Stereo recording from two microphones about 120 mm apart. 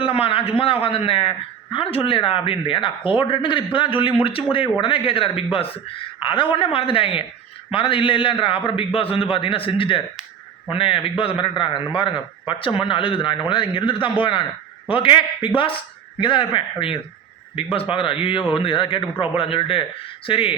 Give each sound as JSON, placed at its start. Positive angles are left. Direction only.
{"t": 0.0, "sound": "speech", "side_deg": 50}